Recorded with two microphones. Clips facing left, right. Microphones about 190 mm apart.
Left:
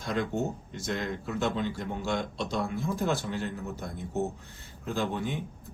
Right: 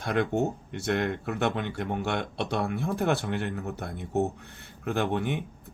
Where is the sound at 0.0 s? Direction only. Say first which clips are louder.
Right 4 dB; 65° right (ahead or behind).